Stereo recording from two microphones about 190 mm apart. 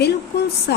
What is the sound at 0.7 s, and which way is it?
Speech, 60° left (ahead or behind).